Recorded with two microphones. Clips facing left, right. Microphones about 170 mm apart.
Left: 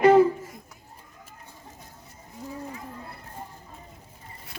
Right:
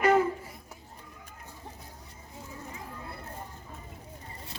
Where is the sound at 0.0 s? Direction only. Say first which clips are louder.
Left 7 dB; 35° left (ahead or behind).